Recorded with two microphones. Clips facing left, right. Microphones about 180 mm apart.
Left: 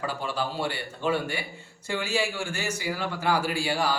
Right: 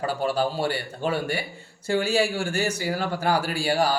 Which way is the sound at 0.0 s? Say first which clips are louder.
Right 6 dB; 40° right (ahead or behind).